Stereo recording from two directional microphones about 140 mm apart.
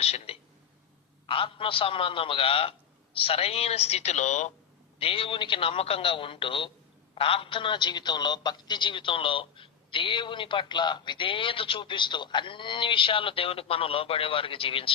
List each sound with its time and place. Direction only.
0.0 s a sound: 45° left (ahead or behind)
1.3 s a man's voice: 40° left (ahead or behind); by 4.5 s 55° left (ahead or behind)
4.9 s a man's voice: 40° left (ahead or behind)